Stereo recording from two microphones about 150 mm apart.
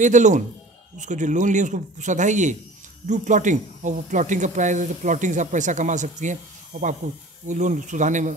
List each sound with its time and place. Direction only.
0.0 s speech: 55° right (ahead or behind)